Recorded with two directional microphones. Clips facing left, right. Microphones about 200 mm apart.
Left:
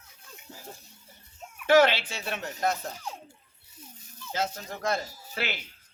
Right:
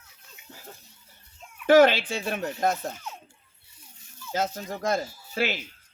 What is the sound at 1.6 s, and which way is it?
Speech, 50° right (ahead or behind).